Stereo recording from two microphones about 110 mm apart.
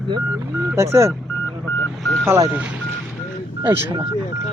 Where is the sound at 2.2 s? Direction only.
25° right (ahead or behind).